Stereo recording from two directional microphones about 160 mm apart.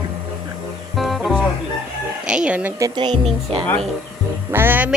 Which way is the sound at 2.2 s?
5° right (ahead or behind).